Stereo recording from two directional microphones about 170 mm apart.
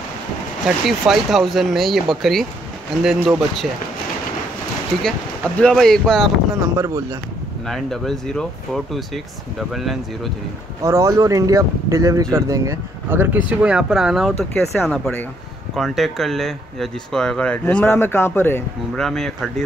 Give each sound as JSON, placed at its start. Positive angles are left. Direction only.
{"t": 0.8, "sound": "speech", "side_deg": 0}
{"t": 5.6, "sound": "speech", "side_deg": 5}
{"t": 6.6, "sound": "speech", "side_deg": -15}
{"t": 7.6, "sound": "speech", "side_deg": 0}
{"t": 10.8, "sound": "speech", "side_deg": -15}
{"t": 18.9, "sound": "speech", "side_deg": 0}